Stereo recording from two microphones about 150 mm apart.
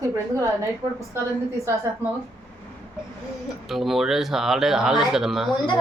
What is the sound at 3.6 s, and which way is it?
Speech, centre (ahead or behind).